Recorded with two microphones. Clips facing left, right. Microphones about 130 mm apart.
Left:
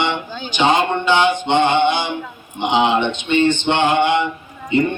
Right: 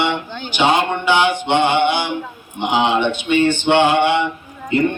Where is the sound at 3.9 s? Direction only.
15° left (ahead or behind).